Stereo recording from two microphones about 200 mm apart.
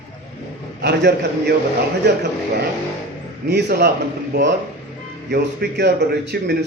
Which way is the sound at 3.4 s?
55° right (ahead or behind).